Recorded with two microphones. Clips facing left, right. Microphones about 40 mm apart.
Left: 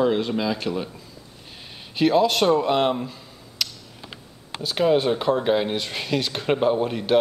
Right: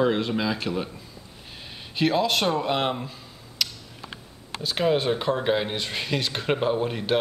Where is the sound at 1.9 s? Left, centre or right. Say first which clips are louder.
Left 4 dB; centre.